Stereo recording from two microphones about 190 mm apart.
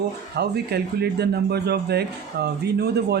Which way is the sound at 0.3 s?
60° right (ahead or behind).